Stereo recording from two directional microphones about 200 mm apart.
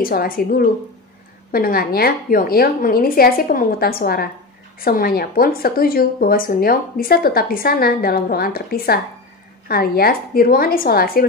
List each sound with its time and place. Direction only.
0.0 s a woman's voice: 45° left (ahead or behind)